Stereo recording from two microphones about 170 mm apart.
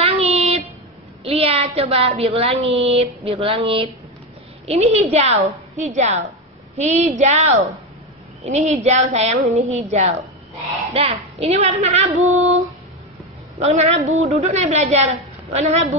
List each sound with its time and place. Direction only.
0.0 s a sound: 35° right (ahead or behind)
1.2 s a woman's voice: 35° right (ahead or behind)
8.5 s a woman's voice: 40° right (ahead or behind)